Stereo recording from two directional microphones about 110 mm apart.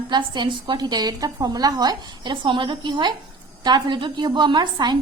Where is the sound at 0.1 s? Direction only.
45° right (ahead or behind).